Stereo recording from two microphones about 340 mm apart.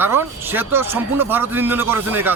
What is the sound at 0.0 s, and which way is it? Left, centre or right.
A man's voice, centre.